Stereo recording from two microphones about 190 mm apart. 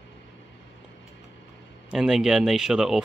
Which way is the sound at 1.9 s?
5° right (ahead or behind).